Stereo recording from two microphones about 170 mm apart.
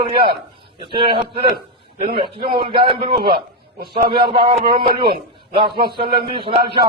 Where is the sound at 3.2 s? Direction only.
65° right (ahead or behind).